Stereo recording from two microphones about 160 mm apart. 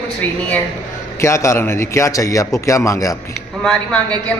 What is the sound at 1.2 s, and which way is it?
A man's voice, 15° left (ahead or behind).